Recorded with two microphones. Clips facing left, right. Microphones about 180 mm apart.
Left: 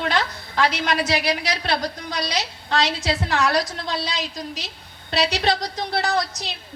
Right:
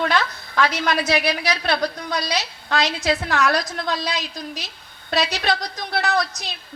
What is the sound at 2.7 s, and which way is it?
Speech, 35° left (ahead or behind).